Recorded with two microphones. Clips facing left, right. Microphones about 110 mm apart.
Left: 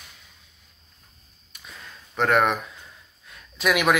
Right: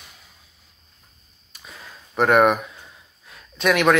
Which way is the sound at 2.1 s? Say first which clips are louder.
Right 5 dB; 5° right (ahead or behind).